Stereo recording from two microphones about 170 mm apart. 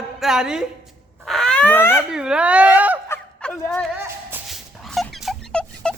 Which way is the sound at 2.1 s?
5° right (ahead or behind).